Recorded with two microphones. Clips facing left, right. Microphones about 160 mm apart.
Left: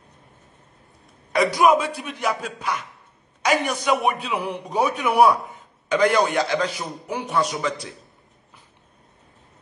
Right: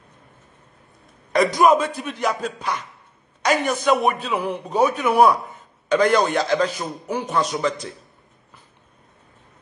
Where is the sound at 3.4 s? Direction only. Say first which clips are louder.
Right 1 dB; 10° left (ahead or behind).